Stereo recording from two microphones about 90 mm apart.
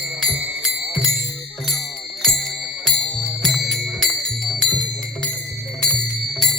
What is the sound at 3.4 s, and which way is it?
Music, centre (ahead or behind).